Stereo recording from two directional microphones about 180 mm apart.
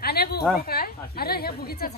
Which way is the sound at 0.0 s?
60° left (ahead or behind).